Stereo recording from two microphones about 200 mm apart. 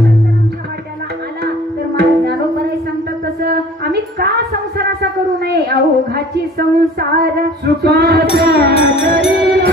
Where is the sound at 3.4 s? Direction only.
50° right (ahead or behind).